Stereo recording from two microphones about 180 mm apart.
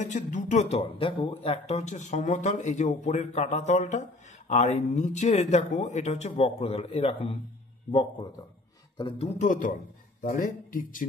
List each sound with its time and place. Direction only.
0.0 s speech: 40° left (ahead or behind); by 9.3 s 25° left (ahead or behind)
9.4 s speech: 45° left (ahead or behind)